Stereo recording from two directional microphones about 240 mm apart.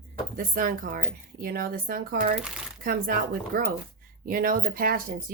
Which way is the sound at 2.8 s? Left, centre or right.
Right.